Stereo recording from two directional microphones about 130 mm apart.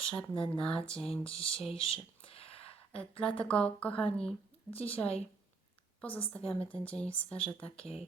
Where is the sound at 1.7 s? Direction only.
45° left (ahead or behind).